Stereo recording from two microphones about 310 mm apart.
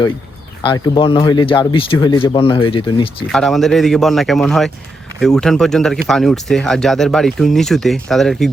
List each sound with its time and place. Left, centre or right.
0.6 s speech: centre
3.2 s speech: centre